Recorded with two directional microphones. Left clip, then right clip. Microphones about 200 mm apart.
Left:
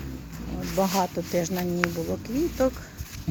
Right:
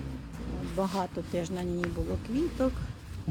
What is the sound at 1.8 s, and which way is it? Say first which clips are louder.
Speech: left 8 dB; 55° left (ahead or behind).